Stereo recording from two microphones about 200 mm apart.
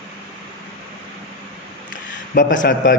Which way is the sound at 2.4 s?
45° left (ahead or behind).